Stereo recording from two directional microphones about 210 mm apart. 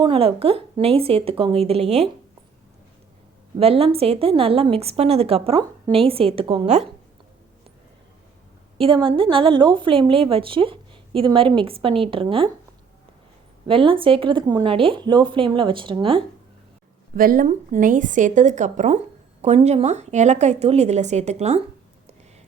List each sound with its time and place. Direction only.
0.0 s a woman's voice: 25° right (ahead or behind)
3.6 s a woman's voice: 30° right (ahead or behind)
8.8 s a woman's voice: 25° right (ahead or behind)
13.7 s a woman's voice: 25° right (ahead or behind)
17.2 s a woman's voice: 40° right (ahead or behind)